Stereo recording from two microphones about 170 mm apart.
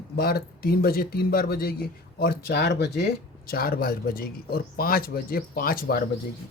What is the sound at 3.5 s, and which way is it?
Speech, 60° left (ahead or behind).